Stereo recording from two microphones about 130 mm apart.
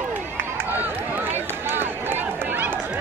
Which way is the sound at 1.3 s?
15° right (ahead or behind).